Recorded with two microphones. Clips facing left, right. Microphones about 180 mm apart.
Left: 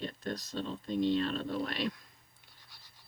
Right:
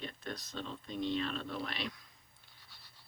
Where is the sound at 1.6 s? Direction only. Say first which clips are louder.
Left 6 dB; 50° left (ahead or behind).